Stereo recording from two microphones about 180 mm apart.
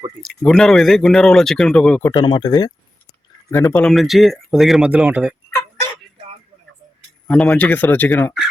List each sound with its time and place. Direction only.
0.2 s speech: centre (ahead or behind)
2.0 s speech: 25° left (ahead or behind)
3.5 s speech: 10° left (ahead or behind); by 5.3 s 5° right (ahead or behind)
7.3 s speech: 5° left (ahead or behind)